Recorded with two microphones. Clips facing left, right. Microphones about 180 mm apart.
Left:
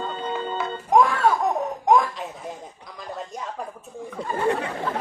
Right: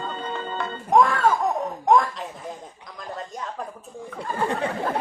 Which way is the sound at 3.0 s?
Centre (ahead or behind).